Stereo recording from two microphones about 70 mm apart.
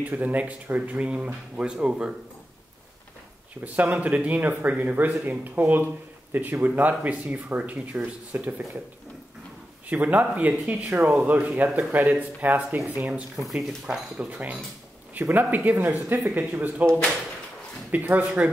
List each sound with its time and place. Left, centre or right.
0.0 s speech: right
3.6 s speech: right
9.8 s speech: right
13.5 s speech: centre
13.8 s speech: centre